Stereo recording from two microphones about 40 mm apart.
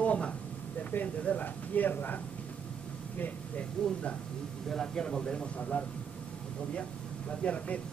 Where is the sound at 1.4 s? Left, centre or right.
Left.